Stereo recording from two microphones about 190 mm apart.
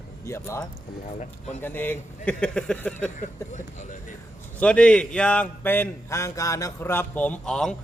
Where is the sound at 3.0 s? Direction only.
40° left (ahead or behind).